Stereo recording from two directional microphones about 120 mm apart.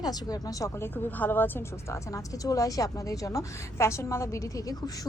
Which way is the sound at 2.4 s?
30° left (ahead or behind).